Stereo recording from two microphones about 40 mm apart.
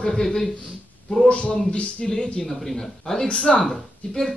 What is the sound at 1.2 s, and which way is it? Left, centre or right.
Speech, left.